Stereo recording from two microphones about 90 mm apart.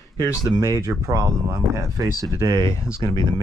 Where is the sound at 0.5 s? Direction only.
35° right (ahead or behind).